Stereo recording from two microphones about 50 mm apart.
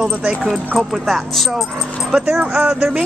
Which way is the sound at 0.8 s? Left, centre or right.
Centre.